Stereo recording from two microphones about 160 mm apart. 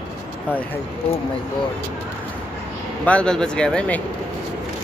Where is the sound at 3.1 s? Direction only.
5° left (ahead or behind).